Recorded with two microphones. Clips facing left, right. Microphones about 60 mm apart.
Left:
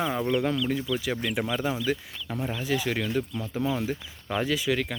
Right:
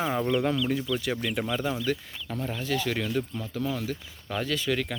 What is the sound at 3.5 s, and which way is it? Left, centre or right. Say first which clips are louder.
Speech: left 3 dB; left.